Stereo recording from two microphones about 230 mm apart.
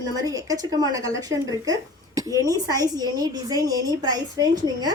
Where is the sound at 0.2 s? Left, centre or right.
Centre.